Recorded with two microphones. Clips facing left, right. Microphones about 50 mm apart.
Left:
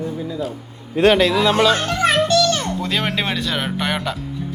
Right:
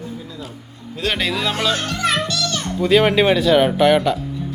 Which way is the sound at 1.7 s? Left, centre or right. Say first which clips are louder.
Left 3 dB; left.